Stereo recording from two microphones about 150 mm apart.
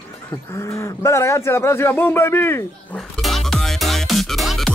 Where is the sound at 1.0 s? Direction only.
20° left (ahead or behind).